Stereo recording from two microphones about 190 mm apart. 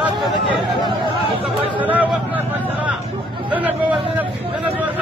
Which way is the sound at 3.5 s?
10° right (ahead or behind).